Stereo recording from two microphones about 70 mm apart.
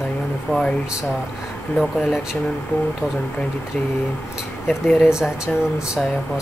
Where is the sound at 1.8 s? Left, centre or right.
Centre.